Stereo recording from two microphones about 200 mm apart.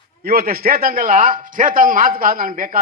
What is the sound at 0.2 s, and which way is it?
A man's voice, 45° right (ahead or behind).